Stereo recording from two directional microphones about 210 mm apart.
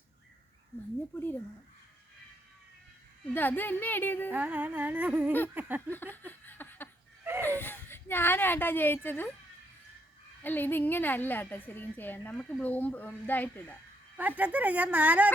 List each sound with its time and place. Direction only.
1.1 s a woman's voice: 10° left (ahead or behind)
3.3 s a woman's voice: 10° left (ahead or behind)
4.3 s speech: 10° right (ahead or behind)
5.9 s a sound: 10° left (ahead or behind)
7.4 s speech: 10° left (ahead or behind)
10.4 s a woman's voice: 10° left (ahead or behind)
14.2 s speech: 10° right (ahead or behind)